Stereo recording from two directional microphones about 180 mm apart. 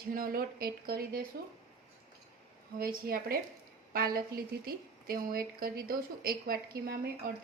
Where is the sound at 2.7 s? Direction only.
55° right (ahead or behind).